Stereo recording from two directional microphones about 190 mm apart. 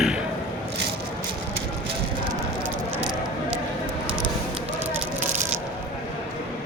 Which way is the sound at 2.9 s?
5° right (ahead or behind).